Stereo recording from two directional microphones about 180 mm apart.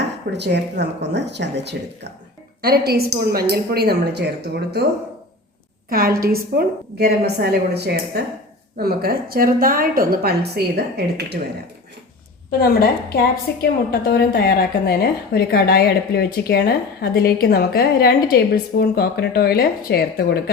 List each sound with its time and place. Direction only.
0.3 s speech: 70° right (ahead or behind)
2.6 s a woman's voice: 60° right (ahead or behind)
5.9 s a woman's voice: 55° right (ahead or behind)
12.5 s a woman's voice: 55° left (ahead or behind)